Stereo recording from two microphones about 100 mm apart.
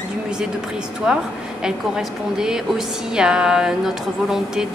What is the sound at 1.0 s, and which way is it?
A woman's voice, 10° right (ahead or behind).